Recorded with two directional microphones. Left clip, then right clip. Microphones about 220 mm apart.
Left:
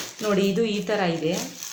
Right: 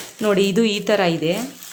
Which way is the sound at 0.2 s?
45° right (ahead or behind).